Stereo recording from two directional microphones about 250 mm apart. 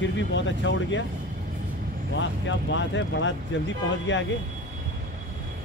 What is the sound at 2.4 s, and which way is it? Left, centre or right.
Speech, left.